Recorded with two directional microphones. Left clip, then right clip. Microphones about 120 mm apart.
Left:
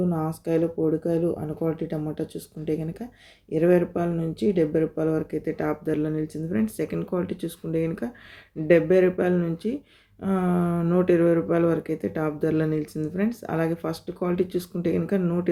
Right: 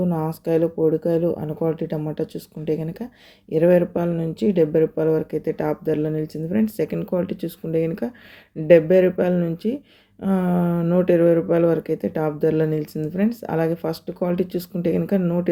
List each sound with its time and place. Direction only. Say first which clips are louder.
0.1 s speech: right 4 dB; 35° right (ahead or behind)